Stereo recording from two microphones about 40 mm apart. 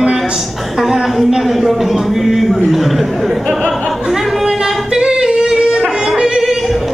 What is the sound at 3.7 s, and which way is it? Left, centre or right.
Singing, centre.